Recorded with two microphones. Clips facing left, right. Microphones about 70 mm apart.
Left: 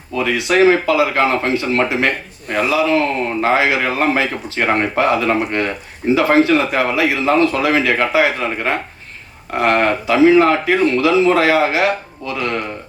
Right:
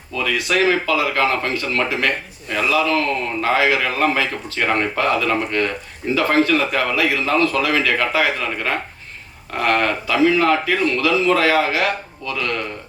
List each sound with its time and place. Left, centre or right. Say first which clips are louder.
0.1 s speech: left 4 dB; left